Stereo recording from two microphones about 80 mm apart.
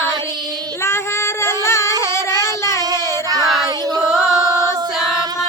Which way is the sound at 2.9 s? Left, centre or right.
Right.